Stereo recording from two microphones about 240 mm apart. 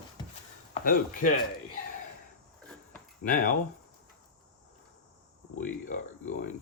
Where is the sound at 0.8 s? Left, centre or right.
Left.